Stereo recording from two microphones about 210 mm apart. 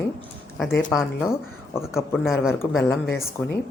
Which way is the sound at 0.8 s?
5° left (ahead or behind).